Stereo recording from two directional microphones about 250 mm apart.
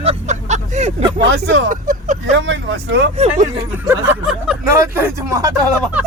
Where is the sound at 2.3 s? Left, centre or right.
Right.